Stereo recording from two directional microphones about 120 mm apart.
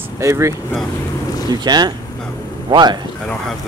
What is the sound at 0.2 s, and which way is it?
Speech, 25° right (ahead or behind).